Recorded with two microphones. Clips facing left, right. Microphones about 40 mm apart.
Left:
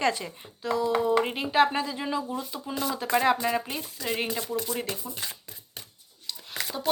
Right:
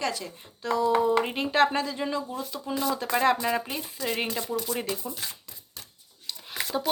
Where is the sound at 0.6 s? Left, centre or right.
Centre.